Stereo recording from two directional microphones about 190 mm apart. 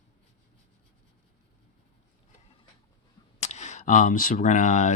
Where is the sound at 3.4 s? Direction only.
35° left (ahead or behind).